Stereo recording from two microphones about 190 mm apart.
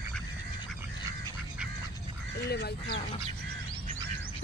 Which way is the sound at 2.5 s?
55° left (ahead or behind).